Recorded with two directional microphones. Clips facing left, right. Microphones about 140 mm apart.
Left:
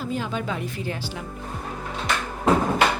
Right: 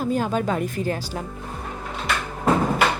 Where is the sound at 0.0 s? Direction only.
45° right (ahead or behind).